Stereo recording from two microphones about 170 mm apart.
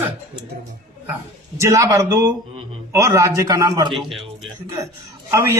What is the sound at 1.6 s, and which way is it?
A man's voice, 20° right (ahead or behind).